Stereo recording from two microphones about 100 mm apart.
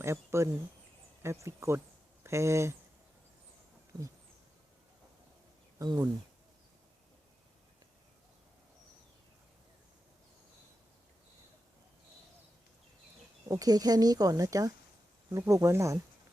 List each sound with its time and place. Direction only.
0.0 s speech: 30° right (ahead or behind)
5.8 s speech: 40° right (ahead or behind)
13.5 s speech: 40° right (ahead or behind)